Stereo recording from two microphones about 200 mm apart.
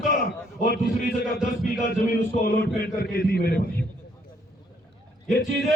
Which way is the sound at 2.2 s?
50° left (ahead or behind).